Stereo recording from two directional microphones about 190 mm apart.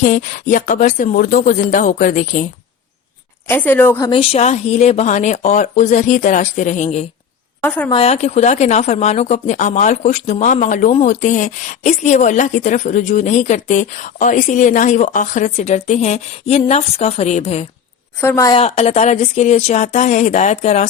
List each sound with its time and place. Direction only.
0.0 s speech: 45° left (ahead or behind)
3.4 s a woman's voice: 10° left (ahead or behind)
4.1 s a woman's voice: 30° left (ahead or behind)
18.2 s a woman's voice: 15° left (ahead or behind)
18.6 s a woman's voice: 35° left (ahead or behind)